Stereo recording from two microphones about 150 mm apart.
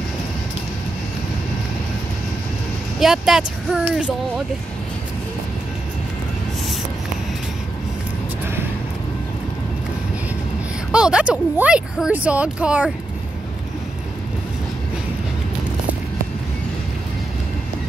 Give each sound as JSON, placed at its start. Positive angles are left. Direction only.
{"t": 3.0, "sound": "speech", "side_deg": 0}
{"t": 10.9, "sound": "speech", "side_deg": -5}